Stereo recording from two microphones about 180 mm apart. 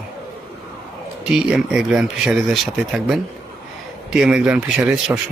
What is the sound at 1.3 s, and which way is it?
Speech, 5° right (ahead or behind).